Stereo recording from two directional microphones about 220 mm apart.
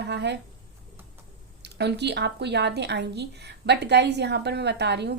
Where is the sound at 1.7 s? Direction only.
50° right (ahead or behind).